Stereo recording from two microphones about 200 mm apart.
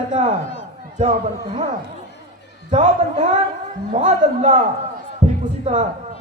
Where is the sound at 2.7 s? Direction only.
30° right (ahead or behind).